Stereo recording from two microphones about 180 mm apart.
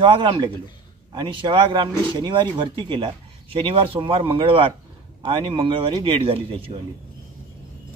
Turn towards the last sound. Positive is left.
turn(degrees=-30)  # may be behind; listen again after turning